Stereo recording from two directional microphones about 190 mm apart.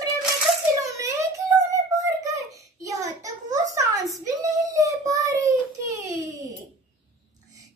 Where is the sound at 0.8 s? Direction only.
15° right (ahead or behind).